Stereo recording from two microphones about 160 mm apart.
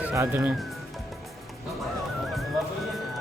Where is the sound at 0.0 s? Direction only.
15° right (ahead or behind).